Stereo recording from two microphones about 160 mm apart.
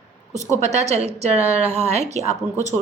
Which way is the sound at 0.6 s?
45° right (ahead or behind).